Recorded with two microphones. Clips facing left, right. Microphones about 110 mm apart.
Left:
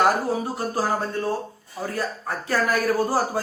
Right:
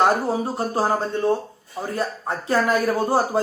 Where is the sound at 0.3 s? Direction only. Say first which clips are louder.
Right 2 dB; 30° right (ahead or behind).